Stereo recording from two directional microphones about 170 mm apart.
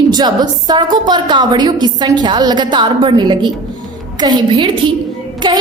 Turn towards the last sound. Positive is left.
turn(degrees=-25)  # may be behind; listen again after turning